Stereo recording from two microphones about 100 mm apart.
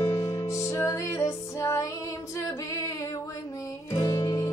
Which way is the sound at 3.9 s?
40° left (ahead or behind).